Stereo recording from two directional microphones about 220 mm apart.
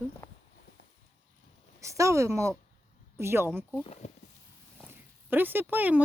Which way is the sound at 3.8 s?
30° left (ahead or behind).